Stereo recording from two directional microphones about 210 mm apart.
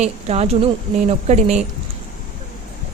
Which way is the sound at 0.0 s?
30° right (ahead or behind).